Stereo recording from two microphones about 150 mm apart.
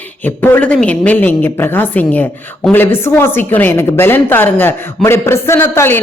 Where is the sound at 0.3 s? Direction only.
15° left (ahead or behind).